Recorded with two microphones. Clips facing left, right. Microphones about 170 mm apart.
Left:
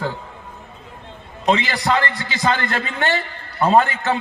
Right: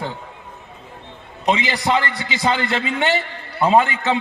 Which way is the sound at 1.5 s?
20° right (ahead or behind).